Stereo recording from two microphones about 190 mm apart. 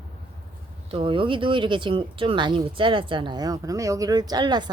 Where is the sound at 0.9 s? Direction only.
25° right (ahead or behind).